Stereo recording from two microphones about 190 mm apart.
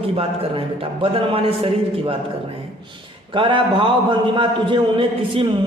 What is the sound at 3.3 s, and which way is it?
A man's voice, 25° right (ahead or behind).